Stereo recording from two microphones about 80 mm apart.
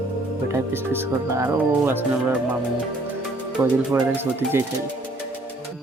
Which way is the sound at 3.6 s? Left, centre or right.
Right.